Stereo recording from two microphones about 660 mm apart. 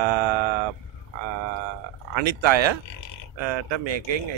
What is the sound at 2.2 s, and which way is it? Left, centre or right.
Speech, right.